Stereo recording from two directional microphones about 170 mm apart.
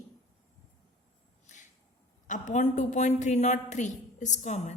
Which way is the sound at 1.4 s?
45° left (ahead or behind).